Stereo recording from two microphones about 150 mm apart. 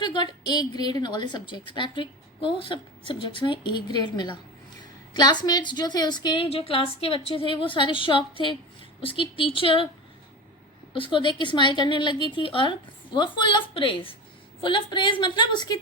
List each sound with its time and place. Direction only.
0.0 s a woman's voice: 30° left (ahead or behind)
10.9 s a woman's voice: 35° left (ahead or behind)